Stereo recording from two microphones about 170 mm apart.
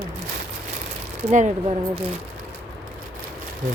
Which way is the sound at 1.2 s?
45° right (ahead or behind).